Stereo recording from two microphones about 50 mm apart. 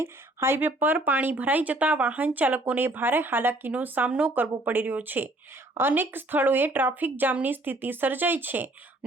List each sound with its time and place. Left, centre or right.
0.0 s speech: right
3.7 s speech: right